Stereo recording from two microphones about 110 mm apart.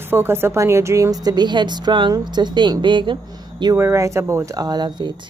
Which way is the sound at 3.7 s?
25° right (ahead or behind).